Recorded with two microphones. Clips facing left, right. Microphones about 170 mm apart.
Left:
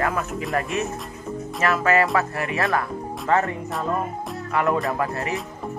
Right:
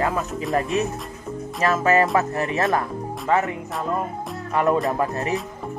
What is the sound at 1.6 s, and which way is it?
Speech, 20° right (ahead or behind).